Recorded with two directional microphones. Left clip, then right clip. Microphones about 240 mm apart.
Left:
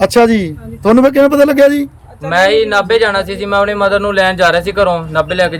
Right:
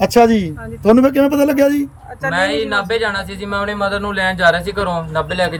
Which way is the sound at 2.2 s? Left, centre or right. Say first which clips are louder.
Left 7 dB; centre.